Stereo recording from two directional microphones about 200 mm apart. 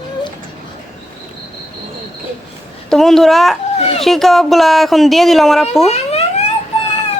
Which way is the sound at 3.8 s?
30° left (ahead or behind).